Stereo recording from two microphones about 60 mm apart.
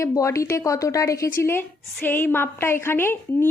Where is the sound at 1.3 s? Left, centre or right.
Left.